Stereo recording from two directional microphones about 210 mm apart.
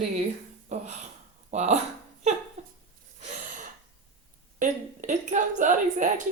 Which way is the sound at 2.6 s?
30° right (ahead or behind).